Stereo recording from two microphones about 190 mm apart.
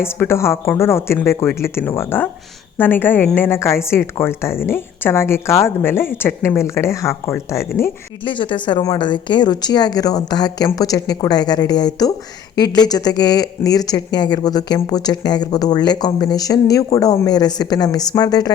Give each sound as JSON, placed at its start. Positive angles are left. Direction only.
{"t": 0.0, "sound": "a woman's voice", "side_deg": 15}
{"t": 8.2, "sound": "speech", "side_deg": 25}